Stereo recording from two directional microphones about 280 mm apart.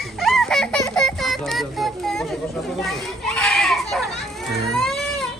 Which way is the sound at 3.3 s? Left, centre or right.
Centre.